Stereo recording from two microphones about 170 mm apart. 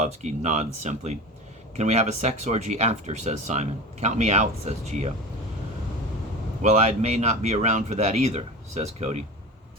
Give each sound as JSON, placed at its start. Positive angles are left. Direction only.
{"t": 0.0, "sound": "speech", "side_deg": -45}
{"t": 6.6, "sound": "speech", "side_deg": -40}